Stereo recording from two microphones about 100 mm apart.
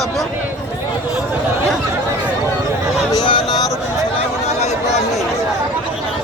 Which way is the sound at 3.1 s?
55° left (ahead or behind).